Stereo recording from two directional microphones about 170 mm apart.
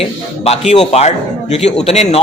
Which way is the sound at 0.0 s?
35° left (ahead or behind).